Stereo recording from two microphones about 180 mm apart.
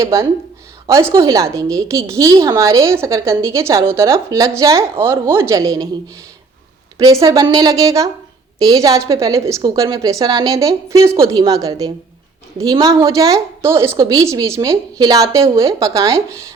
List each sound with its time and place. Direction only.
0.0 s a woman's voice: 15° right (ahead or behind)
7.0 s a woman's voice: 15° right (ahead or behind)